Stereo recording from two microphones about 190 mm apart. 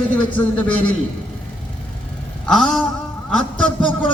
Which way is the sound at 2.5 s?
Centre (ahead or behind).